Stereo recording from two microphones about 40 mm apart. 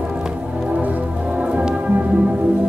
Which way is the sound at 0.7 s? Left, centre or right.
Right.